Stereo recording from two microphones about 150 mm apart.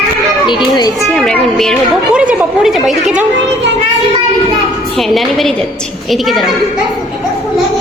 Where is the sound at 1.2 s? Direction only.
5° left (ahead or behind).